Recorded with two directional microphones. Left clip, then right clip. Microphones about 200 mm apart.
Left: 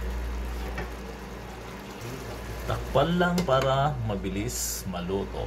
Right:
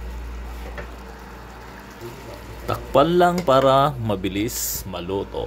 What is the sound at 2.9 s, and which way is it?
Speech, 60° right (ahead or behind).